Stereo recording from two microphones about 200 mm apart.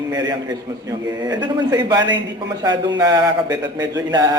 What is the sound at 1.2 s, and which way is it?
A man's voice, 20° right (ahead or behind).